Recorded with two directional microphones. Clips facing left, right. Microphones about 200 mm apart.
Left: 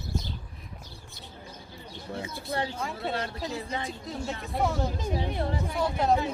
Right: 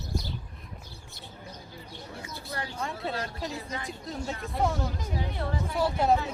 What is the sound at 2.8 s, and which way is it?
Speech, centre (ahead or behind).